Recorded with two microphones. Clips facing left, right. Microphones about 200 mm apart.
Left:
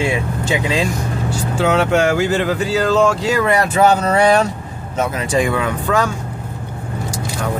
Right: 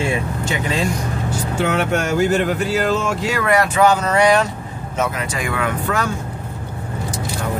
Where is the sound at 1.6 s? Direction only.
90° left.